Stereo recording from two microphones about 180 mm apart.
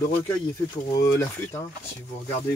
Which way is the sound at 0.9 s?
15° left (ahead or behind).